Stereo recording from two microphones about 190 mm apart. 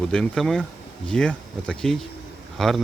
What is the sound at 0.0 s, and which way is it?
Speech, centre (ahead or behind).